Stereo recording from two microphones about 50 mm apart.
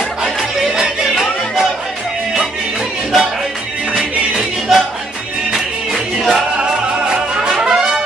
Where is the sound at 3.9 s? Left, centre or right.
Centre.